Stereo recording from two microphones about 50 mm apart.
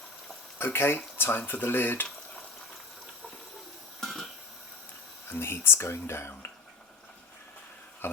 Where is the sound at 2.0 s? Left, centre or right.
Centre.